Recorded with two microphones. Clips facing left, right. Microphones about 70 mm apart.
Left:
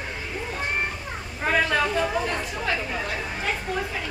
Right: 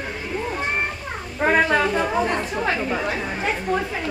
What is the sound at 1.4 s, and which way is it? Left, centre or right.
A woman's voice, right.